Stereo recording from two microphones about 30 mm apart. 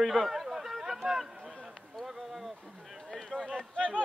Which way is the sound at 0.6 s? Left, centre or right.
Centre.